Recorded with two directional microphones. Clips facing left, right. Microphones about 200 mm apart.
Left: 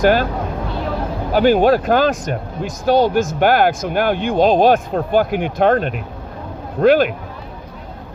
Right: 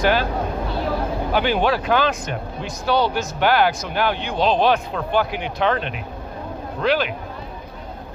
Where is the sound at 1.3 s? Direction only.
45° left (ahead or behind).